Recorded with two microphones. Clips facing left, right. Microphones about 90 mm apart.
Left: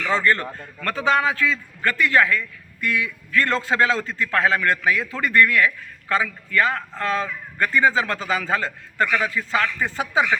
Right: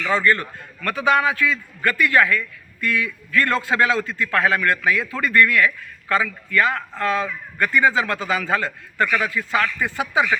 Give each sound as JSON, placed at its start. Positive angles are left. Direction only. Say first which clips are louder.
{"t": 0.1, "sound": "a man's voice", "louder": "right 1 dB", "side_deg": 30}